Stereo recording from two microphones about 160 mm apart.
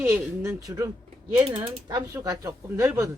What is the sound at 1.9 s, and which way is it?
Speech, 25° right (ahead or behind).